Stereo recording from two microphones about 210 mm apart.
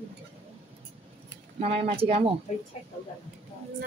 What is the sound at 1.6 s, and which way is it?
Speech, 25° right (ahead or behind).